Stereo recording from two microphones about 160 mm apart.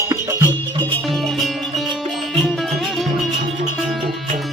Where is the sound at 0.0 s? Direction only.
20° right (ahead or behind).